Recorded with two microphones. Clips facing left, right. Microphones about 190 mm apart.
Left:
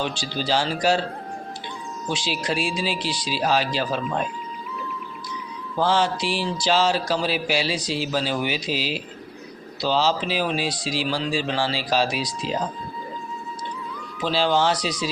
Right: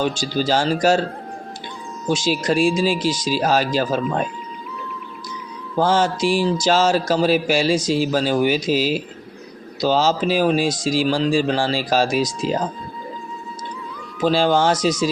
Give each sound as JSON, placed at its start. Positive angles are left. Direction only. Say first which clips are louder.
{"t": 0.0, "sound": "speech", "louder": "right 6 dB", "side_deg": -45}
{"t": 2.0, "sound": "speech", "louder": "right 7 dB", "side_deg": -45}
{"t": 5.8, "sound": "speech", "louder": "right 4 dB", "side_deg": -45}
{"t": 14.2, "sound": "speech", "louder": "right 4 dB", "side_deg": -45}